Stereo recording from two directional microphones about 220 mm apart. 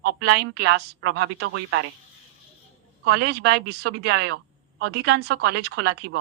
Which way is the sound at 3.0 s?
50° right (ahead or behind).